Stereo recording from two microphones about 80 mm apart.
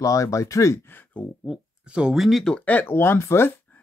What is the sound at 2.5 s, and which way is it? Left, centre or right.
Speech, left.